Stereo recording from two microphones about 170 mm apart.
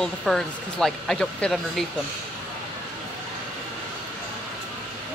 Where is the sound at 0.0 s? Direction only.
Centre (ahead or behind).